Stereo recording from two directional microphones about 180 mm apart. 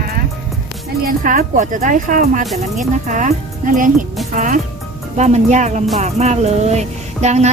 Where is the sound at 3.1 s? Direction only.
45° right (ahead or behind).